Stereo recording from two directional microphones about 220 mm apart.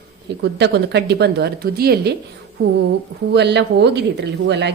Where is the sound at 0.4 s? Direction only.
50° right (ahead or behind).